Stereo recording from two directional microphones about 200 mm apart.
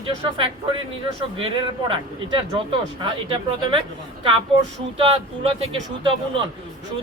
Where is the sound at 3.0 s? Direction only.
25° right (ahead or behind).